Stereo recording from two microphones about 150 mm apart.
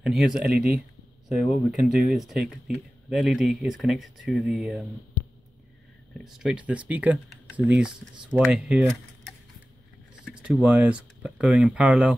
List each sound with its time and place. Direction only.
0.0 s speech: centre (ahead or behind)
1.5 s speech: 5° right (ahead or behind)
6.2 s speech: 5° right (ahead or behind)